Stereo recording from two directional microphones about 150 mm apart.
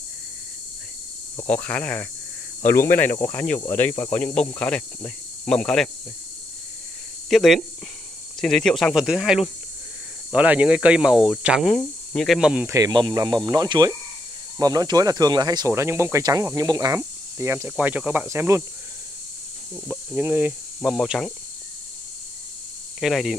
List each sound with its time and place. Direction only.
1.5 s speech: 10° left (ahead or behind)
7.2 s speech: centre (ahead or behind)
12.6 s speech: 25° right (ahead or behind)
19.7 s speech: 10° right (ahead or behind)
22.9 s speech: centre (ahead or behind)